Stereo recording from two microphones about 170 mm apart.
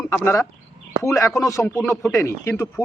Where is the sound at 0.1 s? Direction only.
15° left (ahead or behind).